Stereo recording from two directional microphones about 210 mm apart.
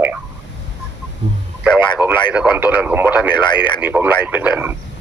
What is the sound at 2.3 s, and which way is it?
Speech, 5° right (ahead or behind).